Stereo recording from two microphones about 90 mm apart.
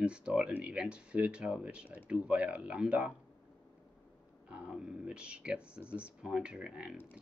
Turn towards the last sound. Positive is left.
turn(degrees=-5)  # may be behind; listen again after turning